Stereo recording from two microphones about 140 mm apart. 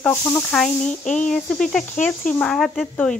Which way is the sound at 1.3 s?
5° left (ahead or behind).